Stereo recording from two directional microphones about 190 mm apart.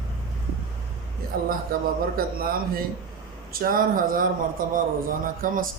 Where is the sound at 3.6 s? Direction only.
50° right (ahead or behind).